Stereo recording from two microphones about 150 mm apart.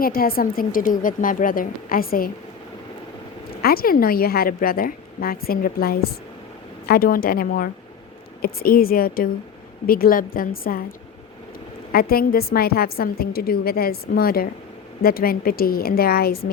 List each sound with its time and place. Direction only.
0.0 s a woman's voice: 75° left (ahead or behind)
3.6 s a woman's voice: 85° left
11.9 s a woman's voice: 80° left